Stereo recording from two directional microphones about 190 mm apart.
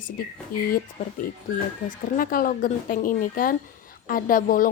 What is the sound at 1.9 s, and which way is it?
Speech, 50° left (ahead or behind).